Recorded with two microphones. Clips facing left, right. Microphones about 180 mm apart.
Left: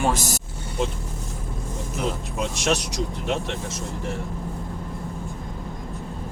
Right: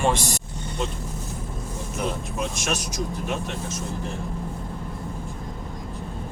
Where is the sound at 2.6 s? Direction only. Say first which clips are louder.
Left 4 dB; 70° left (ahead or behind).